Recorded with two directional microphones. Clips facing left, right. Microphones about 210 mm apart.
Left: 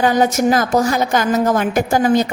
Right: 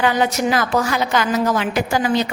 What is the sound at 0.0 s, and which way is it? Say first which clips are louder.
A woman's voice: left 4 dB; 45° left (ahead or behind).